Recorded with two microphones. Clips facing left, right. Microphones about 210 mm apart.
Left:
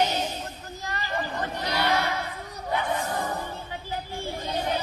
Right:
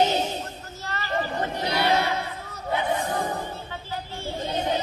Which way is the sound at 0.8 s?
15° left (ahead or behind).